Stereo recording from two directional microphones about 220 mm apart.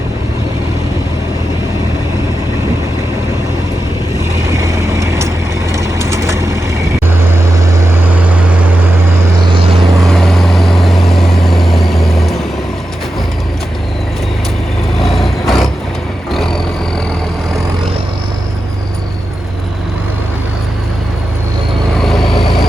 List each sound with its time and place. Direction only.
4.4 s vehicle: 15° right (ahead or behind)
9.5 s vehicle: 25° right (ahead or behind)
10.0 s vehicle: centre (ahead or behind)
14.9 s vehicle: centre (ahead or behind)
16.3 s roaring cats: centre (ahead or behind)
22.0 s vehicle: centre (ahead or behind)